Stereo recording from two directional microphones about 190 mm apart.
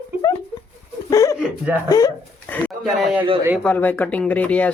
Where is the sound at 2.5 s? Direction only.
10° left (ahead or behind).